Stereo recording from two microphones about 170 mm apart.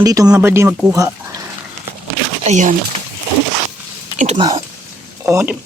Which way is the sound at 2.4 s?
45° right (ahead or behind).